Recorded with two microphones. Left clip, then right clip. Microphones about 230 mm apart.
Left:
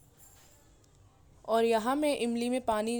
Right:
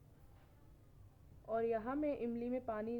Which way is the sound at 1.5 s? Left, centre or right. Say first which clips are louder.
Left 11 dB; left.